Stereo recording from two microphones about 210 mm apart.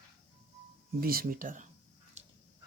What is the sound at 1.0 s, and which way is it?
Speech, 45° right (ahead or behind).